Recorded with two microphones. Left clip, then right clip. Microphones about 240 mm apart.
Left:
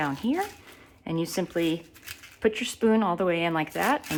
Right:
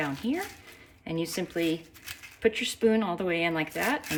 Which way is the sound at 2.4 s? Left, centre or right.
Centre.